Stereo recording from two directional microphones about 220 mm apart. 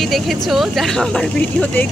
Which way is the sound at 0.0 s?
Centre (ahead or behind).